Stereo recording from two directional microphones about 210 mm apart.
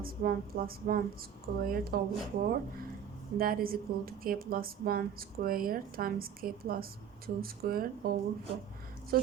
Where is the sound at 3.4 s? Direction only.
45° right (ahead or behind).